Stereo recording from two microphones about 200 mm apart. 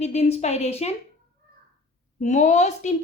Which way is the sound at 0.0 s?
30° left (ahead or behind).